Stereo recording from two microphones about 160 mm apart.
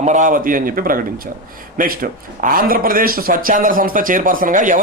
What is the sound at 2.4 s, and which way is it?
Speech, 65° right (ahead or behind).